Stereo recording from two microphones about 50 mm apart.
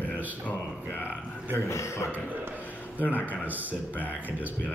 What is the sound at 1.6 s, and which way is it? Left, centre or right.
Speech, left.